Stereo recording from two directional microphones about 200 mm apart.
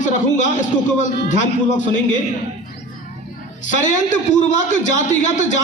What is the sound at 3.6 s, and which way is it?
A man's voice, 40° left (ahead or behind).